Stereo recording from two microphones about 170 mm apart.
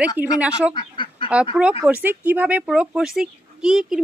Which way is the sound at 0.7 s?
30° left (ahead or behind).